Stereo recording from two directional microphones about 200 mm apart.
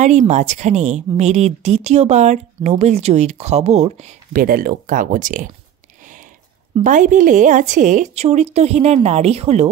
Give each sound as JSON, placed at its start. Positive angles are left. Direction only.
{"t": 0.3, "sound": "a woman's voice", "side_deg": -35}
{"t": 4.4, "sound": "speech", "side_deg": -45}
{"t": 6.8, "sound": "a woman's voice", "side_deg": -40}